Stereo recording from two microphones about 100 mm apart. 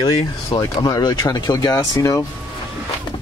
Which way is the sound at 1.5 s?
30° left (ahead or behind).